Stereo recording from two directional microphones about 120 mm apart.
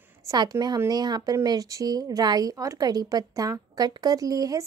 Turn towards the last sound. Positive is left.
turn(degrees=-30)  # may be behind; listen again after turning